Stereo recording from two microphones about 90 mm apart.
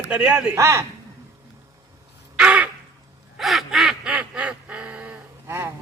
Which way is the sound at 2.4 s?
15° right (ahead or behind).